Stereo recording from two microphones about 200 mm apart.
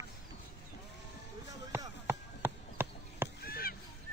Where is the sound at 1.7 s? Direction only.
15° right (ahead or behind).